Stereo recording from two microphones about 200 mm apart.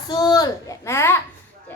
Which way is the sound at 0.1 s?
20° left (ahead or behind).